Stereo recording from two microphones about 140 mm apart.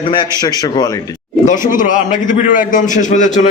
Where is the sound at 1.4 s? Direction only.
70° left (ahead or behind).